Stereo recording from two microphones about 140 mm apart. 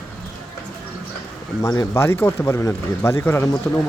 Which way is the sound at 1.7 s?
20° left (ahead or behind).